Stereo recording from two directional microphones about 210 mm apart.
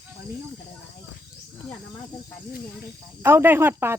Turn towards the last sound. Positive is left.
turn(degrees=-10)  # may be behind; listen again after turning